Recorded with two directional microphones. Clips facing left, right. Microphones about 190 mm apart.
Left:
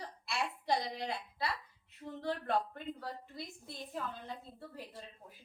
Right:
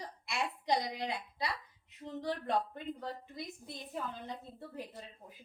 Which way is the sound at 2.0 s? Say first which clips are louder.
Right 1 dB; 15° right (ahead or behind).